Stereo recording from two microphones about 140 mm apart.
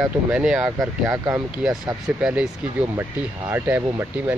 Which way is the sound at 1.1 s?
20° right (ahead or behind).